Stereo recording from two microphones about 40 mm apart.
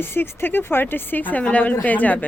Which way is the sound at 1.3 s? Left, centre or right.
Left.